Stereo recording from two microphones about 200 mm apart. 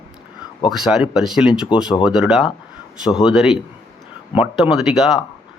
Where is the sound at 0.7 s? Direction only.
Centre (ahead or behind).